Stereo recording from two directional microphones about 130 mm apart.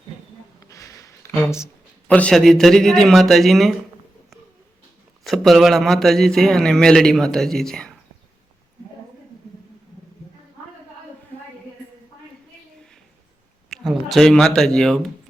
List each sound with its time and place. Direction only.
0.7 s a sound: 25° left (ahead or behind)
2.0 s a man's voice: 10° left (ahead or behind)
5.2 s a man's voice: centre (ahead or behind)
13.7 s speech: centre (ahead or behind)